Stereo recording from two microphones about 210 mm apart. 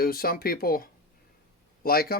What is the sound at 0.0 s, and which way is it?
Speech, 45° left (ahead or behind).